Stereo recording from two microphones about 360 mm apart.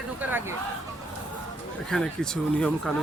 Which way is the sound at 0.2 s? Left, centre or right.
Centre.